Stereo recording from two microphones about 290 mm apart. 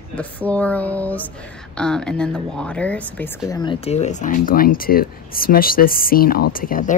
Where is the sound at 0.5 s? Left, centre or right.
Centre.